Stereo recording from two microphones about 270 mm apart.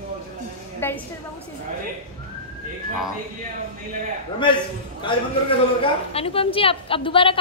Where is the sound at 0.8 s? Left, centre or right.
Centre.